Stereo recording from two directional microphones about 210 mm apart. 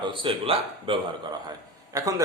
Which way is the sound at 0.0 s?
25° right (ahead or behind).